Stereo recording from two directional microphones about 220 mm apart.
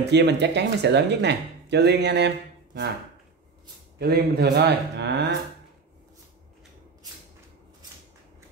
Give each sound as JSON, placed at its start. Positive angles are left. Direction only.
{"t": 0.0, "sound": "speech", "side_deg": -50}
{"t": 4.0, "sound": "speech", "side_deg": -45}